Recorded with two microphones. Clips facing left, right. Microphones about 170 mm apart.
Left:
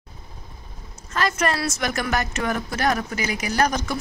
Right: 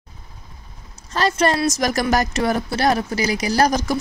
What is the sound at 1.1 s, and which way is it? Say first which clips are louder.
A woman's voice: right 4 dB; 30° right (ahead or behind).